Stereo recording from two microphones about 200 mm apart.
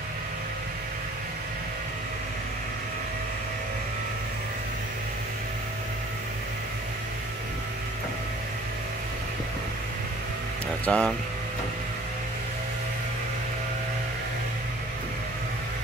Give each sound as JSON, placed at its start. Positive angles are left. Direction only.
{"t": 10.9, "sound": "speech", "side_deg": 5}